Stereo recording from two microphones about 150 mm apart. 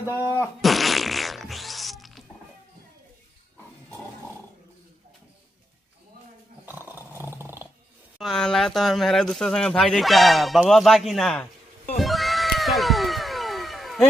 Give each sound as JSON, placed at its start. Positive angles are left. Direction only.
{"t": 0.2, "sound": "speech", "side_deg": 20}
{"t": 0.6, "sound": "fart", "side_deg": 0}
{"t": 6.6, "sound": "roar", "side_deg": -15}
{"t": 8.2, "sound": "speech", "side_deg": 5}
{"t": 12.0, "sound": "cat", "side_deg": 0}